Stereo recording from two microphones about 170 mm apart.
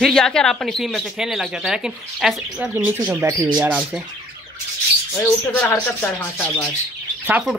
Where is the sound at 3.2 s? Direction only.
15° right (ahead or behind).